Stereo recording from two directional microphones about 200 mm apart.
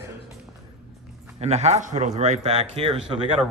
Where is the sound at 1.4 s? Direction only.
30° right (ahead or behind).